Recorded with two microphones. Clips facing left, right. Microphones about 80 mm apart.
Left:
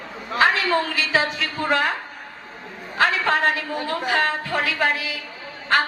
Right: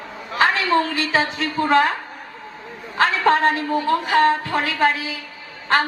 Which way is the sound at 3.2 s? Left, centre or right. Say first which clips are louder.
Right 4 dB; right.